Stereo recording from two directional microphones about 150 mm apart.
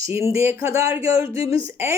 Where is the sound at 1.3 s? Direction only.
20° right (ahead or behind).